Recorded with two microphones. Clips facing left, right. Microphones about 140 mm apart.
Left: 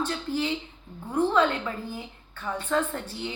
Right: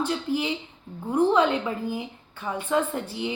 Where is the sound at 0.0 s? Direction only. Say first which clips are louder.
Right 2 dB; 15° right (ahead or behind).